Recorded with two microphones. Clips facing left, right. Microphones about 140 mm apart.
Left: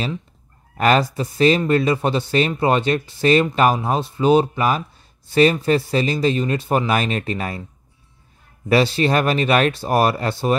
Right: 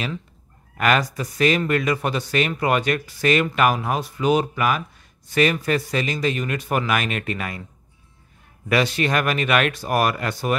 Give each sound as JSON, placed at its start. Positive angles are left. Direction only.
{"t": 0.7, "sound": "speech", "side_deg": 30}
{"t": 8.6, "sound": "speech", "side_deg": 30}